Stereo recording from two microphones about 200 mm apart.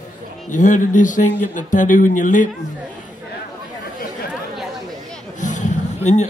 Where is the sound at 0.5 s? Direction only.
40° left (ahead or behind).